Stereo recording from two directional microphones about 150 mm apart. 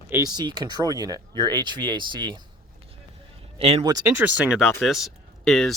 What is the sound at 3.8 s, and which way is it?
Speech, 25° right (ahead or behind).